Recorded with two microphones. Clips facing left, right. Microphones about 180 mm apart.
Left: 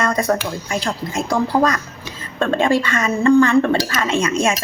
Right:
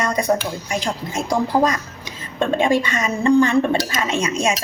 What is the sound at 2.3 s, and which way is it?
Speech, 15° right (ahead or behind).